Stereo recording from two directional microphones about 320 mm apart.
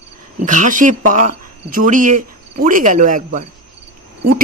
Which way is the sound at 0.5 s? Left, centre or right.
Right.